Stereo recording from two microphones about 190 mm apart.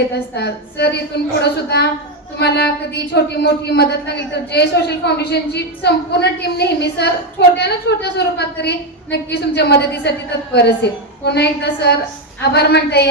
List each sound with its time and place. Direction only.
0.3 s a woman's voice: 60° left (ahead or behind)